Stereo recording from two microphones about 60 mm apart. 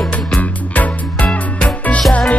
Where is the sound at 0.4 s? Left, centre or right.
Left.